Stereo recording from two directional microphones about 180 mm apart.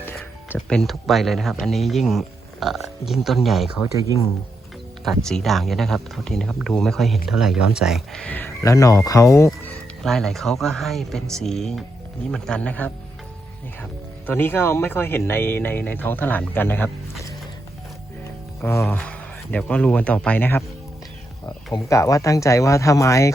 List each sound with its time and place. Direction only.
0.7 s speech: centre (ahead or behind)
5.0 s speech: 5° left (ahead or behind)
9.5 s speech: centre (ahead or behind)
14.3 s speech: 10° left (ahead or behind)
18.6 s speech: 15° left (ahead or behind)